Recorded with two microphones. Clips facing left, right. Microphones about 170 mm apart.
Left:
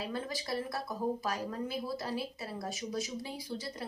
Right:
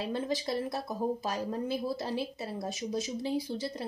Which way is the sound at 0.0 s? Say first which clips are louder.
Right 5 dB; 25° right (ahead or behind).